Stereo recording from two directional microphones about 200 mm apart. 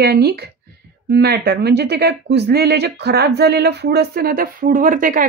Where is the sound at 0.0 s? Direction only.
55° right (ahead or behind).